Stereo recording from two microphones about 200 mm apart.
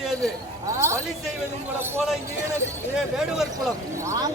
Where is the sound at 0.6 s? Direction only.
15° right (ahead or behind).